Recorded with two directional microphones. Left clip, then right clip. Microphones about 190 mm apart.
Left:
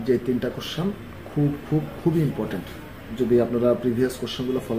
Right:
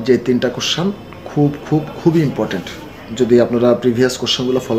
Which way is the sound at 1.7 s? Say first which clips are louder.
Right 9 dB; 35° right (ahead or behind).